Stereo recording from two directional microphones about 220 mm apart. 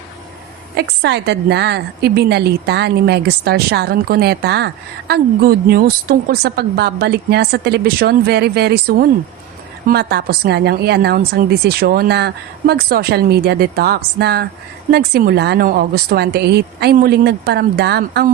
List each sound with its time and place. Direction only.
0.8 s a woman's voice: 50° right (ahead or behind)